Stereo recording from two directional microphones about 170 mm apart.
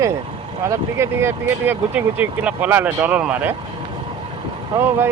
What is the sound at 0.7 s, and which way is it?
Speech, 15° right (ahead or behind).